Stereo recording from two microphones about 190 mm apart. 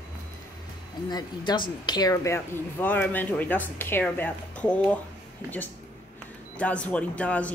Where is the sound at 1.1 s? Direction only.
25° left (ahead or behind).